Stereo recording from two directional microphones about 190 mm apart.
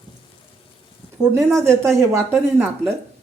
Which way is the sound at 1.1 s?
15° right (ahead or behind).